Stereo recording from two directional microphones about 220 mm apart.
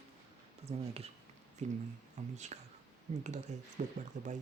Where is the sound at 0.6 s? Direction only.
30° right (ahead or behind).